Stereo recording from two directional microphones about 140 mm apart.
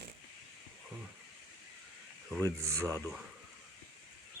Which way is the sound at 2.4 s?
20° right (ahead or behind).